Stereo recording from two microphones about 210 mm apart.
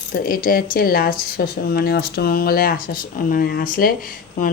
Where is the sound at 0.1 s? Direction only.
45° left (ahead or behind).